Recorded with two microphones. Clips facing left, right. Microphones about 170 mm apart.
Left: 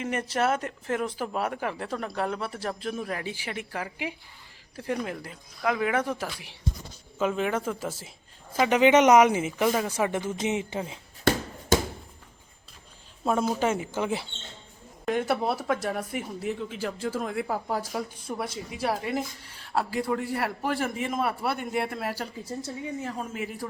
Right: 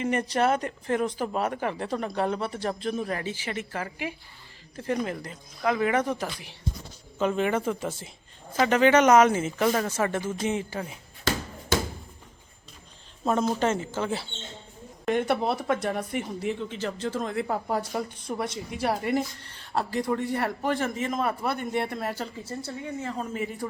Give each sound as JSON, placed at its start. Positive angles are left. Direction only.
{"t": 0.0, "sound": "speech", "side_deg": 5}
{"t": 11.3, "sound": "a sound", "side_deg": 55}
{"t": 13.2, "sound": "speech", "side_deg": 5}
{"t": 15.0, "sound": "speech", "side_deg": 0}